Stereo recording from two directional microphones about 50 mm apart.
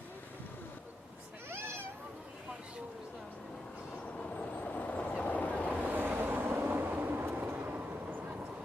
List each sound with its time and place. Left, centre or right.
1.5 s cat: right
4.2 s train: left
5.2 s vehicle: left
5.7 s vehicle: right
7.5 s vehicle: right